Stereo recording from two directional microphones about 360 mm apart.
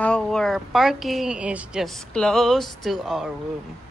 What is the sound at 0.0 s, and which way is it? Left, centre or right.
Speech, centre.